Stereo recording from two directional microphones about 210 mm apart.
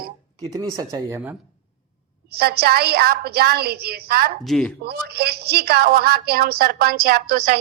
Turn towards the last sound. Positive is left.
turn(degrees=-45)  # may be behind; listen again after turning